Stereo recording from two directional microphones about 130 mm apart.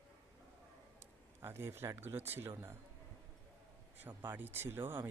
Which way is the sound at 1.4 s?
20° right (ahead or behind).